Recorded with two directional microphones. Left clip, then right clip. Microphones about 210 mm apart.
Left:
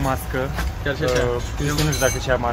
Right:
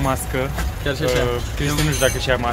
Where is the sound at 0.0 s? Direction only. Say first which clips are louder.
Right 2 dB; 5° right (ahead or behind).